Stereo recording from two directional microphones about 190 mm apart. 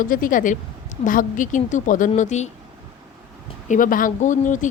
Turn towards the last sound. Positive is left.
turn(degrees=40)  # may be behind; listen again after turning